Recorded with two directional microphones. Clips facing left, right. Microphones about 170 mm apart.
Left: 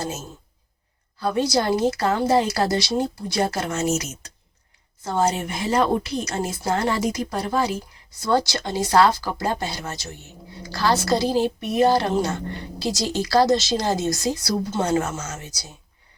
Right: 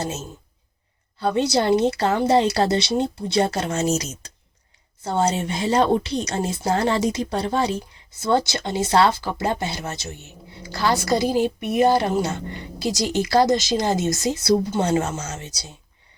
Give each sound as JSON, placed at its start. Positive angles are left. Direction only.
{"t": 1.2, "sound": "a woman's voice", "side_deg": -25}
{"t": 5.0, "sound": "a woman's voice", "side_deg": -25}